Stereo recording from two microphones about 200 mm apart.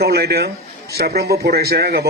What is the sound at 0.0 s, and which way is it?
A man's voice, 55° right (ahead or behind).